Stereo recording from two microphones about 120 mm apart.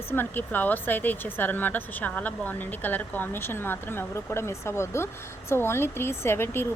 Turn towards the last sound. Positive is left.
turn(degrees=20)  # may be behind; listen again after turning